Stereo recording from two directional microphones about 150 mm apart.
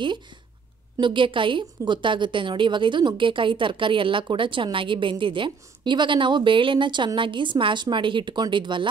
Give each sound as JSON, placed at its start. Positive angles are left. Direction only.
{"t": 0.9, "sound": "a woman's voice", "side_deg": -35}